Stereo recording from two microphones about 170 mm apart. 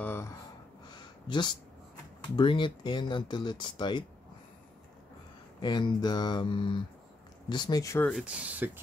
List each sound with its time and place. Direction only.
0.0 s gasp: 15° left (ahead or behind)
0.8 s a sound: 25° left (ahead or behind)
2.3 s speech: 30° left (ahead or behind)
5.6 s speech: 25° left (ahead or behind)
8.1 s speech: 5° right (ahead or behind)